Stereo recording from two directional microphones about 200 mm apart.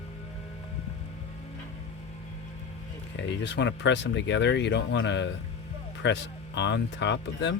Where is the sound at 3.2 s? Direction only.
60° left (ahead or behind).